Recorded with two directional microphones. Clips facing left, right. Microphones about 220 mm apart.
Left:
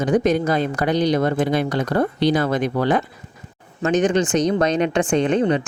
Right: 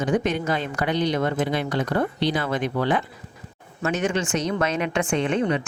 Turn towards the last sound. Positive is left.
turn(degrees=35)  # may be behind; listen again after turning